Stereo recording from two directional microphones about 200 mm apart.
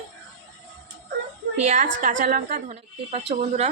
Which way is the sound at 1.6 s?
35° right (ahead or behind).